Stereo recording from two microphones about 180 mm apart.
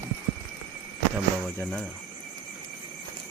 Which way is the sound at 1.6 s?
5° left (ahead or behind).